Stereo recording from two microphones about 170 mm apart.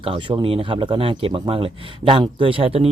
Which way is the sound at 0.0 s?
30° right (ahead or behind).